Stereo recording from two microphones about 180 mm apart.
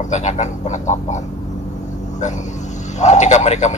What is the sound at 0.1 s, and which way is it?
Speech, 40° left (ahead or behind).